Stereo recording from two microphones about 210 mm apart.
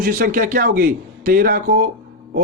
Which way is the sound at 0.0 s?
40° right (ahead or behind).